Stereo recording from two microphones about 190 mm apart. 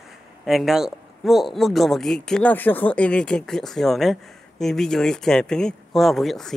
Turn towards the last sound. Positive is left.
turn(degrees=0)  # may be behind; listen again after turning